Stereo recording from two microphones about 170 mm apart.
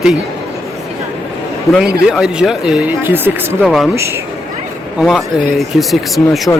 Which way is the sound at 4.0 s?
15° right (ahead or behind).